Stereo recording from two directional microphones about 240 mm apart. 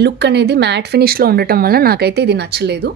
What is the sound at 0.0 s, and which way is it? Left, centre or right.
Speech, right.